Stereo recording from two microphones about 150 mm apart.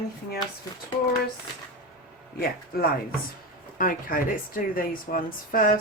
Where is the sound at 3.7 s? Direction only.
70° left (ahead or behind).